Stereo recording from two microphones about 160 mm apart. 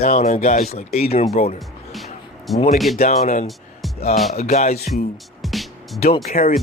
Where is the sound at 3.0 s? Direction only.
45° left (ahead or behind).